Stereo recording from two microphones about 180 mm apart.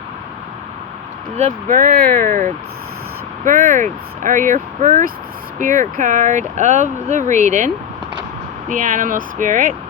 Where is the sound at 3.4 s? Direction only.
45° right (ahead or behind).